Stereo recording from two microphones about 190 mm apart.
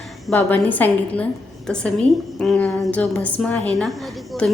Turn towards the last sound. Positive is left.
turn(degrees=0)  # may be behind; listen again after turning